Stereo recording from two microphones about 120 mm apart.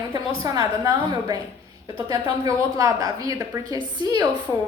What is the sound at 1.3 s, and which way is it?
A woman's voice, 35° right (ahead or behind).